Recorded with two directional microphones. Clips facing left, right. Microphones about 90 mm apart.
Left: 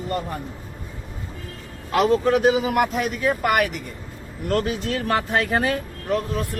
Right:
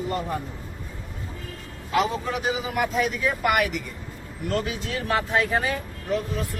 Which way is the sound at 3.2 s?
45° left (ahead or behind).